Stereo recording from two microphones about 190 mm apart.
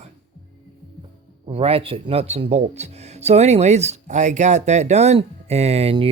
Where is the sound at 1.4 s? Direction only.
30° right (ahead or behind).